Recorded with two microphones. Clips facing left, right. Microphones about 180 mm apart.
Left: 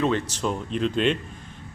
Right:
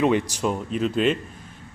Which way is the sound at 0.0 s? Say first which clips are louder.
Right 3 dB; 15° right (ahead or behind).